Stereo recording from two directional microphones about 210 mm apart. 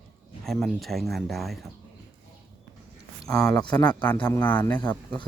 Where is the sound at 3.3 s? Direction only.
5° left (ahead or behind).